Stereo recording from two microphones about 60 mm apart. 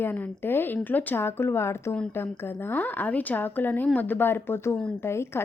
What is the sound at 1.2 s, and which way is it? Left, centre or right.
A woman's voice, left.